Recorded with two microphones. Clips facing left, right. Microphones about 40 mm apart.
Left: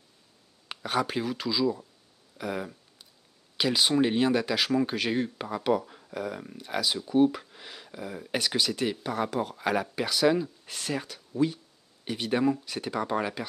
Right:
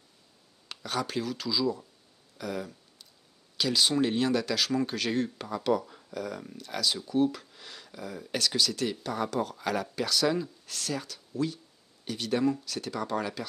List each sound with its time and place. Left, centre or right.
0.7 s speech: left
2.3 s a sound: centre
3.5 s speech: left